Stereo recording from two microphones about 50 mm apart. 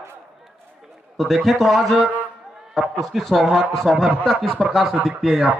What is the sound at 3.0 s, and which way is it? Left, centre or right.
Speech, centre.